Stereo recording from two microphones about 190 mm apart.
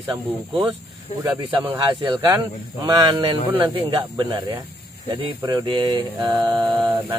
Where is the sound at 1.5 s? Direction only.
25° right (ahead or behind).